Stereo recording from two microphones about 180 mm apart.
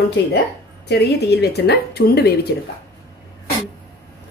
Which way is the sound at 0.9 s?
65° left (ahead or behind).